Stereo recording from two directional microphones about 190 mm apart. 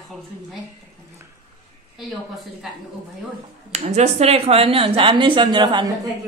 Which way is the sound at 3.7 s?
35° right (ahead or behind).